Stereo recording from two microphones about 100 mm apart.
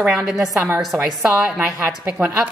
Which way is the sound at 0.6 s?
25° right (ahead or behind).